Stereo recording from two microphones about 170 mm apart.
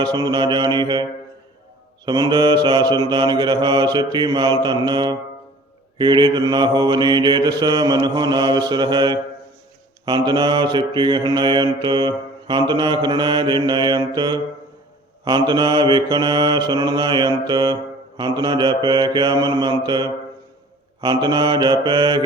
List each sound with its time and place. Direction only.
0.0 s mantra: 25° right (ahead or behind)
2.0 s mantra: 25° right (ahead or behind)